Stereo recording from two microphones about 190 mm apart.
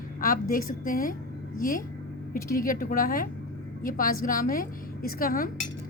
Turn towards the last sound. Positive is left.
turn(degrees=50)  # may be behind; listen again after turning